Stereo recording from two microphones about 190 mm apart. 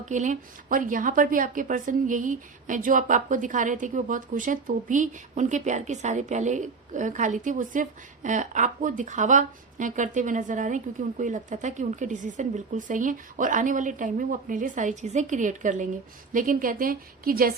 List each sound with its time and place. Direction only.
0.0 s a woman's voice: 40° right (ahead or behind)